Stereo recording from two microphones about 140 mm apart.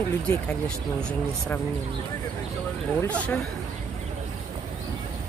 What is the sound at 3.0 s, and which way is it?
Speech, 10° left (ahead or behind).